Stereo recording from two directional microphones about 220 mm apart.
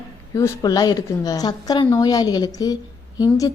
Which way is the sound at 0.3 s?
15° left (ahead or behind).